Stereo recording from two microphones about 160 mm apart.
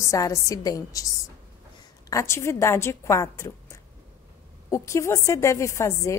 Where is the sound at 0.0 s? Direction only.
20° left (ahead or behind).